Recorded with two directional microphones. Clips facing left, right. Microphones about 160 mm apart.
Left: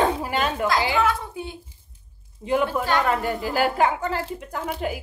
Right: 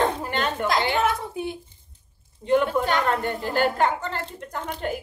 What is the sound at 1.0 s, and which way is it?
Speech, 20° right (ahead or behind).